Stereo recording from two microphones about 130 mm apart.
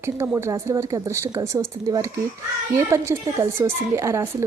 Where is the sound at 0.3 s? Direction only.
20° right (ahead or behind).